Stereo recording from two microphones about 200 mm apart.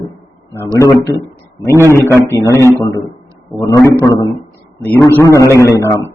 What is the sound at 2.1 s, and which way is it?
A man's voice, 15° left (ahead or behind).